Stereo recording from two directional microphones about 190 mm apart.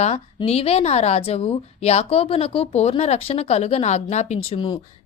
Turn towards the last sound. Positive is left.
turn(degrees=25)  # may be behind; listen again after turning